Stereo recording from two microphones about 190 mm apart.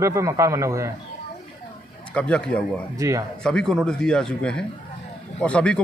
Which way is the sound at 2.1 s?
5° left (ahead or behind).